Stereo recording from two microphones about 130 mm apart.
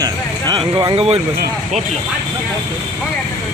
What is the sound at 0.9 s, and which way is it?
Speech, 50° right (ahead or behind).